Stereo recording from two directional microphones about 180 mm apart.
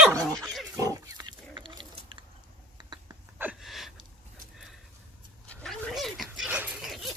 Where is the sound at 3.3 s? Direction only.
5° right (ahead or behind).